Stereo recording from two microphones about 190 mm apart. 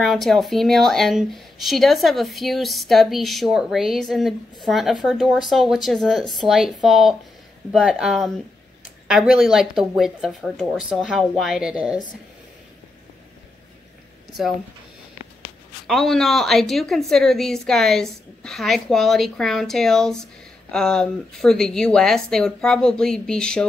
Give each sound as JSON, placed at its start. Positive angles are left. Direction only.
{"t": 0.0, "sound": "speech", "side_deg": 0}
{"t": 15.9, "sound": "speech", "side_deg": 0}